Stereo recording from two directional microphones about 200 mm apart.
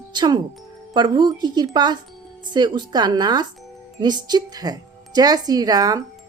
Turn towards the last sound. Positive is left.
turn(degrees=-20)  # may be behind; listen again after turning